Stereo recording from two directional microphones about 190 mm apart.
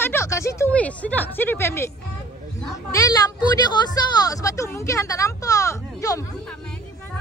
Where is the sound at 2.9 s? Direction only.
20° left (ahead or behind).